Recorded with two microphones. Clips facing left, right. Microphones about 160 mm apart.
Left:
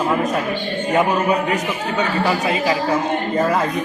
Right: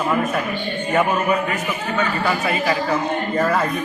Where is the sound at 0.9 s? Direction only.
15° left (ahead or behind).